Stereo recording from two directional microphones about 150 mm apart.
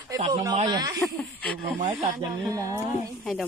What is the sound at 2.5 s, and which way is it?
Speech, 20° right (ahead or behind).